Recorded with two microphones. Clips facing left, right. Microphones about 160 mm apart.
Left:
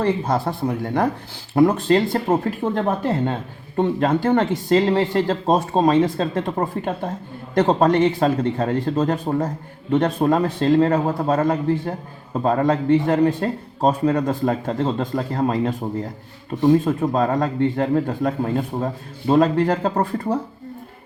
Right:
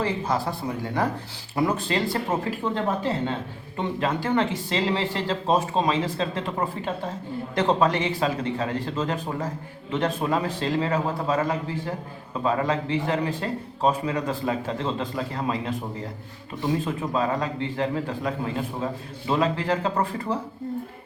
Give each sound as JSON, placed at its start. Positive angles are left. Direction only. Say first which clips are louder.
{"t": 0.0, "sound": "a man's voice", "louder": "left 5 dB", "side_deg": 55}
{"t": 1.5, "sound": "a man's voice", "louder": "left 8 dB", "side_deg": 55}